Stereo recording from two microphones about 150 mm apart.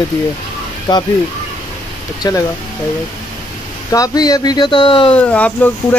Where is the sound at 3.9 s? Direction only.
25° left (ahead or behind).